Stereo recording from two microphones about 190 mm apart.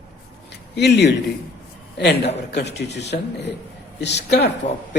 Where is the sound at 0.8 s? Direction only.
60° left (ahead or behind).